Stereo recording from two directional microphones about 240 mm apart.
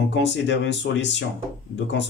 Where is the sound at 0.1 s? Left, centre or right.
Left.